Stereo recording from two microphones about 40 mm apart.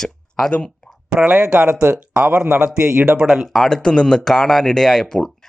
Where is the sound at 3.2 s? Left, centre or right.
Centre.